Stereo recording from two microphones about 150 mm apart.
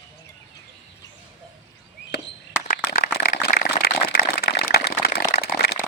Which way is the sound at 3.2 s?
80° left.